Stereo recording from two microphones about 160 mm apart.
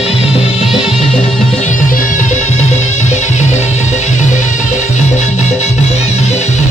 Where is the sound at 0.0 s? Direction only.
40° left (ahead or behind).